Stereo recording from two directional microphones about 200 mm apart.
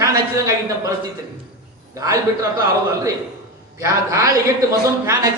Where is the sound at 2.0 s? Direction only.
15° right (ahead or behind).